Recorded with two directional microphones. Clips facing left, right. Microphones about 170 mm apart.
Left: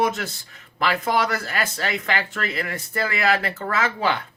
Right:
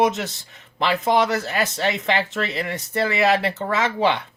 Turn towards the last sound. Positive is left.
turn(degrees=-20)  # may be behind; listen again after turning